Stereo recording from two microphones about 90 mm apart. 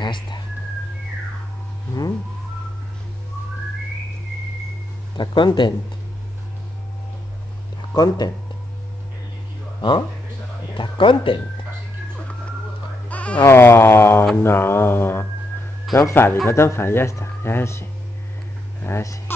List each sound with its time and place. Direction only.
0.0 s whistling: 55° left (ahead or behind)
5.1 s speech: 60° left (ahead or behind)
7.9 s speech: 45° left (ahead or behind)
9.8 s speech: 60° left (ahead or behind)
13.1 s goat: 15° left (ahead or behind)
13.5 s speech: 25° left (ahead or behind)
18.9 s speech: 30° left (ahead or behind)